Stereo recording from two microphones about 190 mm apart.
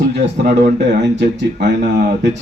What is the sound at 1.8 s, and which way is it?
Speech, 40° right (ahead or behind).